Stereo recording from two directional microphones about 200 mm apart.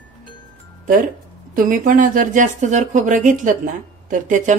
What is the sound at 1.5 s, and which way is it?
Speech, 45° right (ahead or behind).